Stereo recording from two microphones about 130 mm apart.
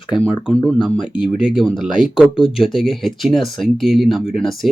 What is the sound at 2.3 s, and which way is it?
Speech, 40° left (ahead or behind).